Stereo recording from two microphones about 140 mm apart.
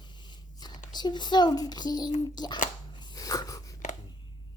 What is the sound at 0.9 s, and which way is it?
A child's voice, 30° left (ahead or behind).